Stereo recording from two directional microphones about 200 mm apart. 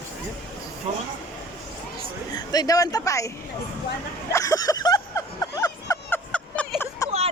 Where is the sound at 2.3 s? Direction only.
20° left (ahead or behind).